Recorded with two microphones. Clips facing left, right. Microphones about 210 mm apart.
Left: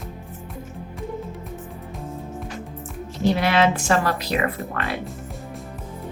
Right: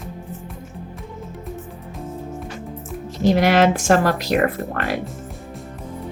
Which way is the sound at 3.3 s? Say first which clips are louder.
Right 5 dB; 45° right (ahead or behind).